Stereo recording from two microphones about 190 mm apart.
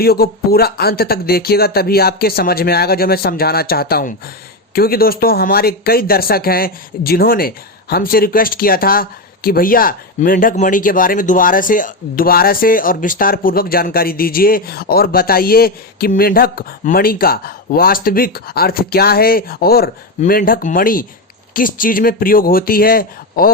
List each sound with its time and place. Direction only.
0.0 s speech: 55° left (ahead or behind)